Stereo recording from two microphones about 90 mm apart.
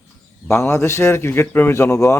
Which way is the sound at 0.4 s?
30° left (ahead or behind).